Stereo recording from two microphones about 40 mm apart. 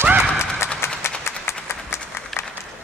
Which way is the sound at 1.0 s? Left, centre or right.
Left.